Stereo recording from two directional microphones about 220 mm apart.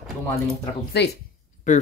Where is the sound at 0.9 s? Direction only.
50° left (ahead or behind).